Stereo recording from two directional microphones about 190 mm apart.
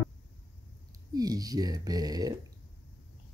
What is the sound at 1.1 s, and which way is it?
Speech, 20° right (ahead or behind).